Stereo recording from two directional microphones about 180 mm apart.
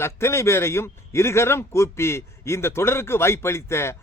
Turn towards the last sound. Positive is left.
turn(degrees=15)  # may be behind; listen again after turning